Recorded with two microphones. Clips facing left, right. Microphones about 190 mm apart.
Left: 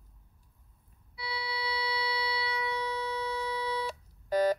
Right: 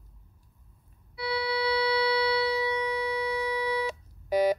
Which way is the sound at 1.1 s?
65° right (ahead or behind).